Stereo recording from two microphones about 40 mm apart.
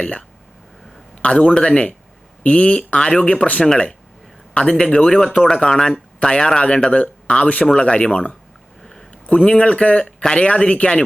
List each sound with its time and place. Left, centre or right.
0.0 s speech: left
4.7 s speech: centre
8.8 s a sound: centre
9.2 s speech: left